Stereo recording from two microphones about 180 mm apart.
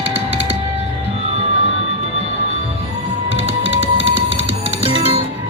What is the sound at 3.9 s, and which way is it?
Music, 30° right (ahead or behind).